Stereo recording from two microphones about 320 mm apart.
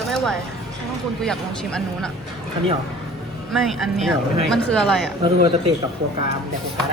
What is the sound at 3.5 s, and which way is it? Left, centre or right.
Speech, centre.